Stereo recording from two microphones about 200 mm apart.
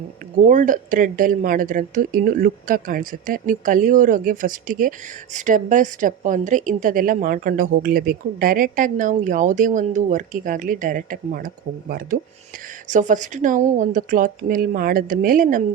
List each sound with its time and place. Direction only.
0.3 s speech: 40° right (ahead or behind)